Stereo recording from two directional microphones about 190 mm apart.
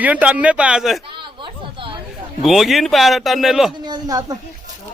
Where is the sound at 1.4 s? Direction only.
25° right (ahead or behind).